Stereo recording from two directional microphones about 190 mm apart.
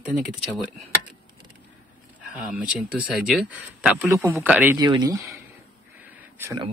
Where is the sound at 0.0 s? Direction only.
5° right (ahead or behind).